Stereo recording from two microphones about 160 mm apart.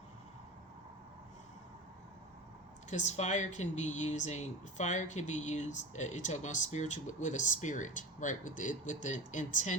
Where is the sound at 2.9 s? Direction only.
45° left (ahead or behind).